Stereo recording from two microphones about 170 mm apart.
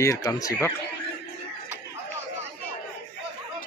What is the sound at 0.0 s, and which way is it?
Speech, 20° left (ahead or behind).